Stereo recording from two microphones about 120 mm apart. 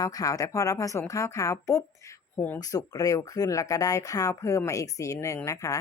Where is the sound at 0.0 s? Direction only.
30° left (ahead or behind).